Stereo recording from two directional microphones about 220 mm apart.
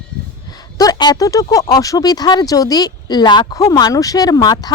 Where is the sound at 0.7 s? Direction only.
15° left (ahead or behind).